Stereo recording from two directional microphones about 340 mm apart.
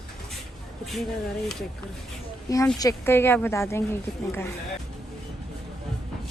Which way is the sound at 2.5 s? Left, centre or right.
Centre.